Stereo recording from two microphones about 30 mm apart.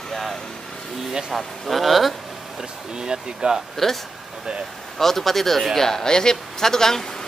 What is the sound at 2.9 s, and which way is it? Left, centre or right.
Speech, right.